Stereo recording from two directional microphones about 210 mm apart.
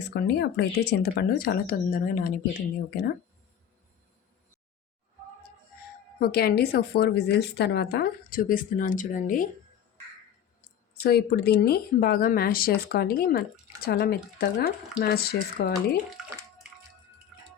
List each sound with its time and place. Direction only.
0.1 s a woman's voice: 55° left (ahead or behind)
6.1 s a woman's voice: 45° left (ahead or behind)
11.0 s a woman's voice: 50° left (ahead or behind)